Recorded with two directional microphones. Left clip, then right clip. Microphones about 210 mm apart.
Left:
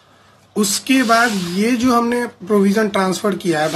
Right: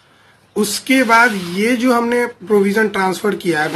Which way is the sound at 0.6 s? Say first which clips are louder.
Right 2 dB; 15° left (ahead or behind).